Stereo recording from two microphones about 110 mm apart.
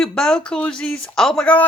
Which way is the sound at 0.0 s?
5° left (ahead or behind).